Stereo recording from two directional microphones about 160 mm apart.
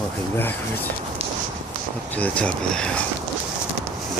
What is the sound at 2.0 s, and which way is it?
Speech, 10° left (ahead or behind).